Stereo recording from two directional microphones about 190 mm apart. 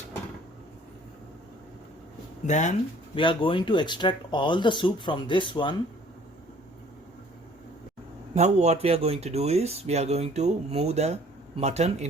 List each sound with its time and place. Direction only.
2.5 s speech: 40° left (ahead or behind)
3.2 s speech: 25° left (ahead or behind)
8.4 s speech: 35° right (ahead or behind)